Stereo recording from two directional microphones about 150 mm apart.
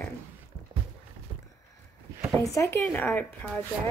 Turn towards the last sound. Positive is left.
turn(degrees=10)  # may be behind; listen again after turning